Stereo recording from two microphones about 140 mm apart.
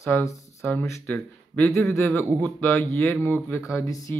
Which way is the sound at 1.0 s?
10° left (ahead or behind).